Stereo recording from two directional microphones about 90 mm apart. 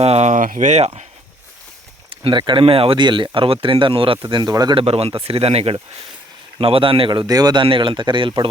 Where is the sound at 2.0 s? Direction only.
90° right.